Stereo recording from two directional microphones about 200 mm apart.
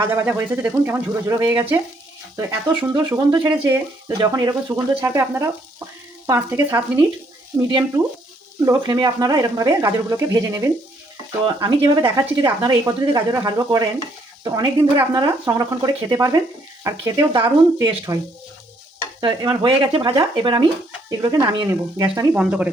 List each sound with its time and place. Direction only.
0.0 s speech: 10° right (ahead or behind)
8.6 s speech: 15° right (ahead or behind)
19.2 s speech: 20° right (ahead or behind)
22.3 s speech: 5° right (ahead or behind)